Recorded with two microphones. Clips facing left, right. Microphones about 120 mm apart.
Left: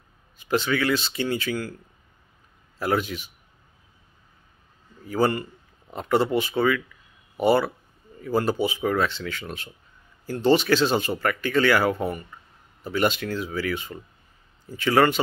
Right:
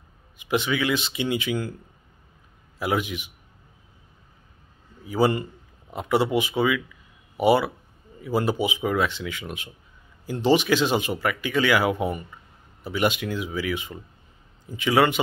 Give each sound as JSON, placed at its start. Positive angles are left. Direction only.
{"t": 0.4, "sound": "speech", "side_deg": -15}
{"t": 2.8, "sound": "speech", "side_deg": -15}
{"t": 5.0, "sound": "a man's voice", "side_deg": -10}